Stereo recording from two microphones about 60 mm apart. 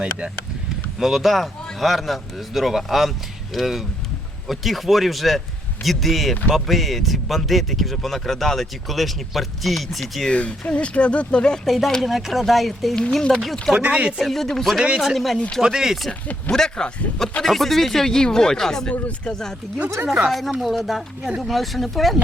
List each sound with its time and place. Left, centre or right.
0.9 s speech: centre
10.2 s speech: centre
11.6 s speech: centre
13.0 s speech: centre
13.7 s speech: right
14.2 s speech: centre
16.5 s speech: centre
20.6 s speech: centre